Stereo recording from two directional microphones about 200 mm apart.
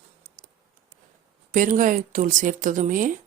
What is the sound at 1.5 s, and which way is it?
A woman's voice, 40° right (ahead or behind).